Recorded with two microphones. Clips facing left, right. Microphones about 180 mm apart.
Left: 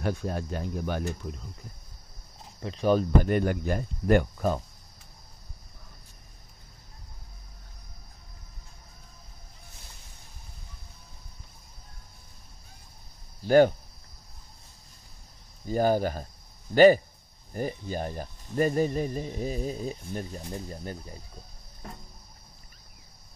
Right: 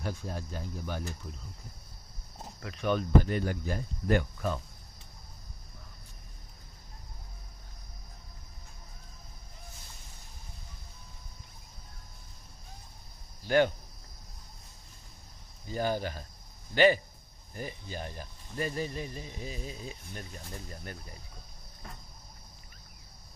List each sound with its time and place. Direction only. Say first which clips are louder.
0.0 s speech: left 7 dB; 65° left (ahead or behind)
2.6 s speech: left 6 dB; 30° left (ahead or behind)
3.2 s speech: left 3 dB; 55° left (ahead or behind); by 4.6 s 40° left (ahead or behind)
13.5 s speech: left 7 dB; 40° left (ahead or behind)
15.6 s speech: left 7 dB; 45° left (ahead or behind); by 21.2 s 30° left (ahead or behind)